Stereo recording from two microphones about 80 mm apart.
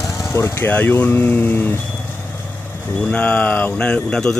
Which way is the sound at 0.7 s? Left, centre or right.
Left.